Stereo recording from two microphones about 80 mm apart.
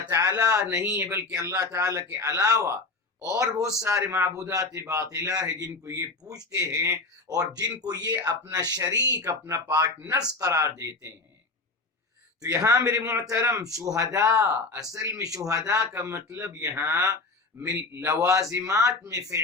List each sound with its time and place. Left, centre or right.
0.1 s speech: right
0.8 s a man's voice: right
12.5 s a man's voice: right